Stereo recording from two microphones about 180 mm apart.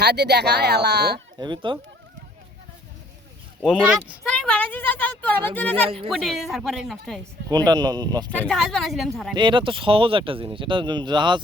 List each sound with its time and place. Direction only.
0.0 s speech: 65° right (ahead or behind)
1.4 s speech: 25° right (ahead or behind)
3.6 s speech: centre (ahead or behind)
7.5 s speech: 20° right (ahead or behind)
8.3 s speech: 5° left (ahead or behind)
9.3 s speech: 25° right (ahead or behind)